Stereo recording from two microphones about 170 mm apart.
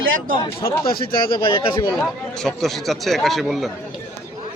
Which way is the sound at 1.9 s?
Centre (ahead or behind).